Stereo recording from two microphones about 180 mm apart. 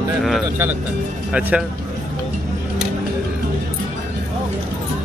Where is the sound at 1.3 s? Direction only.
5° right (ahead or behind).